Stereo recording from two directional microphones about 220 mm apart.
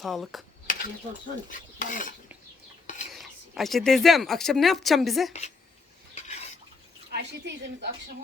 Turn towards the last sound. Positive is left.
turn(degrees=-50)  # may be behind; listen again after turning